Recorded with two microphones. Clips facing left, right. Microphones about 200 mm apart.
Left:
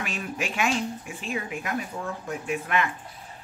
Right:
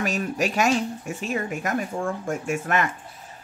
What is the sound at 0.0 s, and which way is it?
Speech, 40° right (ahead or behind).